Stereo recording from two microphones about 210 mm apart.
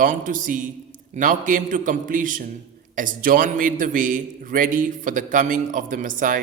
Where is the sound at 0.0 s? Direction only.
40° right (ahead or behind).